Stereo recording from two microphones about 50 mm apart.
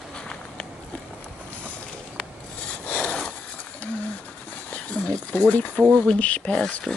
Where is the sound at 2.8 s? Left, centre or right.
Left.